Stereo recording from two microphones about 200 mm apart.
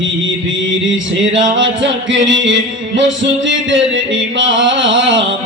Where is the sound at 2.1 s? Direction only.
70° right (ahead or behind).